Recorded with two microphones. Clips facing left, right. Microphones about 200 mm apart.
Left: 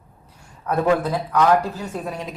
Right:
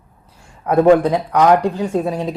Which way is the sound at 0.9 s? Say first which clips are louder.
Right 8 dB; 30° right (ahead or behind).